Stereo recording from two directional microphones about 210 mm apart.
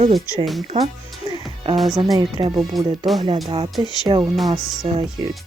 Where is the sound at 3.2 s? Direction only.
25° right (ahead or behind).